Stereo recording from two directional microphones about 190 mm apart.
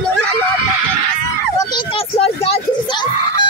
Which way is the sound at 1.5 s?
25° left (ahead or behind).